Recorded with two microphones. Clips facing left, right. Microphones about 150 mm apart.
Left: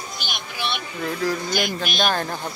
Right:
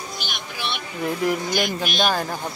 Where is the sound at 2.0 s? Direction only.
5° right (ahead or behind).